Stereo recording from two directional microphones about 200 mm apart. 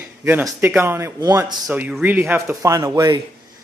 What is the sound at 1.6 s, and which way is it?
A man's voice, 5° right (ahead or behind).